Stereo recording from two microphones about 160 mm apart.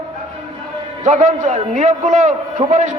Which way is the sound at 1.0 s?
50° right (ahead or behind).